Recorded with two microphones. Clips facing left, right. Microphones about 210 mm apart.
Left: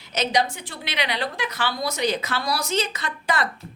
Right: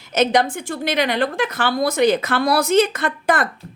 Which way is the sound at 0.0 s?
50° right (ahead or behind).